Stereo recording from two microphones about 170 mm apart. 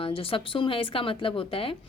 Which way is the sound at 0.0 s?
30° left (ahead or behind).